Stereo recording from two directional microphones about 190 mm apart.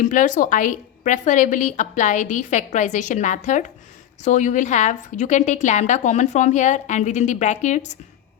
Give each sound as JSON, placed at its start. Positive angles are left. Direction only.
{"t": 0.0, "sound": "a woman's voice", "side_deg": 45}